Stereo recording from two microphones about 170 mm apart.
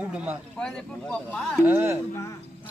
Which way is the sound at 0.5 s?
5° left (ahead or behind).